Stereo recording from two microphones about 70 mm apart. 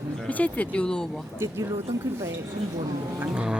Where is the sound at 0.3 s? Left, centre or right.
Left.